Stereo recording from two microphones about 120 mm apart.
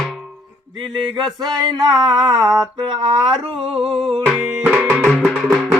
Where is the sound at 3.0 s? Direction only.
45° right (ahead or behind).